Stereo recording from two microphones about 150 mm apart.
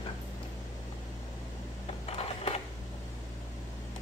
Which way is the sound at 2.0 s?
40° left (ahead or behind).